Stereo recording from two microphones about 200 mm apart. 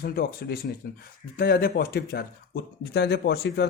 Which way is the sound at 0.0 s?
50° left (ahead or behind).